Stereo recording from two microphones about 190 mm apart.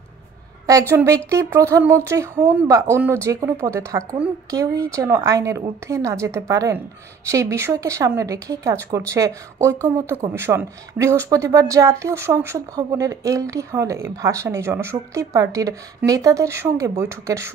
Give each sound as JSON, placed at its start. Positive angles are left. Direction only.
{"t": 0.7, "sound": "a woman's voice", "side_deg": -15}